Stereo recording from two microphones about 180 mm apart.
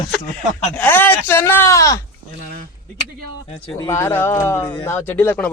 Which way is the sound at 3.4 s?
35° left (ahead or behind).